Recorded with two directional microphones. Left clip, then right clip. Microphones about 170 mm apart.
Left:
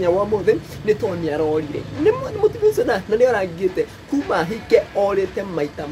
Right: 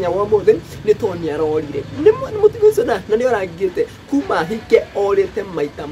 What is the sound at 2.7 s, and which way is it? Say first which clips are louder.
Speech: right 2 dB; 20° right (ahead or behind).